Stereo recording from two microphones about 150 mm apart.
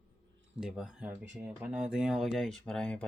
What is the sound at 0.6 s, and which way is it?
Speech, 5° right (ahead or behind).